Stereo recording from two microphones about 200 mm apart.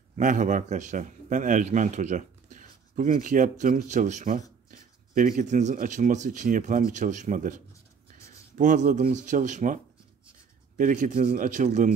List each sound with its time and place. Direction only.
0.1 s a man's voice: 40° right (ahead or behind)
10.8 s speech: 40° right (ahead or behind)